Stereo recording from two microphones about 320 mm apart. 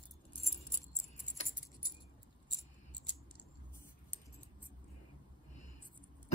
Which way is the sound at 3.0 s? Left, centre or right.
Centre.